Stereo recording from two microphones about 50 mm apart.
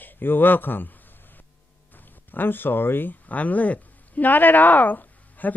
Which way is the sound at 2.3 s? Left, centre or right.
Left.